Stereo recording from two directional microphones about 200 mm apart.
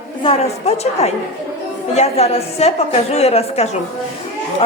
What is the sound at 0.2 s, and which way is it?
A woman's voice, 30° left (ahead or behind).